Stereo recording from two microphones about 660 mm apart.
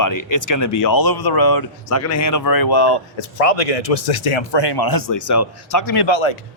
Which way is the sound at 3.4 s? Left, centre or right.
Left.